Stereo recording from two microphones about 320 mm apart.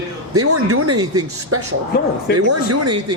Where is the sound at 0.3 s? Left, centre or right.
Right.